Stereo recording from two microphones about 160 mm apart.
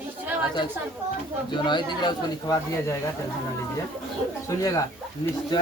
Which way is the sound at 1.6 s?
30° left (ahead or behind).